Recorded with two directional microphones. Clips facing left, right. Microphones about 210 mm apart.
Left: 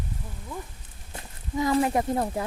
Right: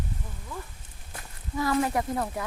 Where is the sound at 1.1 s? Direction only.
20° left (ahead or behind).